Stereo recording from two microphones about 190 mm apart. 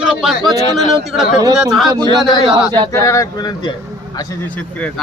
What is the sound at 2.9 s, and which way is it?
Speech, 15° left (ahead or behind).